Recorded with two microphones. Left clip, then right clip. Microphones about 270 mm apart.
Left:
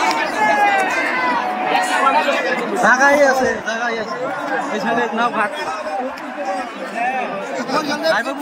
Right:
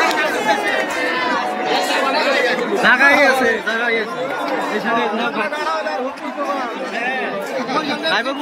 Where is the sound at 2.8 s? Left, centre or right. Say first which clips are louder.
Even; centre.